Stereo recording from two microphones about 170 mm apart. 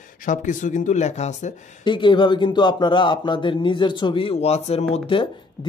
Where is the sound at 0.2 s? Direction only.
50° left (ahead or behind).